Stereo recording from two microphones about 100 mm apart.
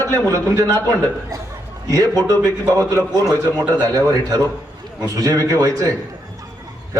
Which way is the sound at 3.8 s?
40° right (ahead or behind).